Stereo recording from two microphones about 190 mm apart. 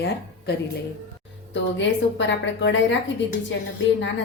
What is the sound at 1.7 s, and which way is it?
A woman's voice, 70° left (ahead or behind).